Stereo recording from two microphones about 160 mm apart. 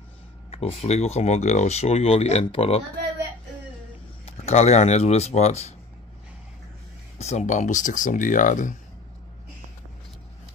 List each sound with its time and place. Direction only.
0.5 s speech: 40° left (ahead or behind)
4.3 s speech: 45° left (ahead or behind)
7.2 s speech: 45° left (ahead or behind)